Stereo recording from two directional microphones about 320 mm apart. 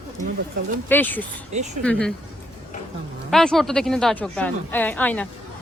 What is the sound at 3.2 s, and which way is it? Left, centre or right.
Speech, centre.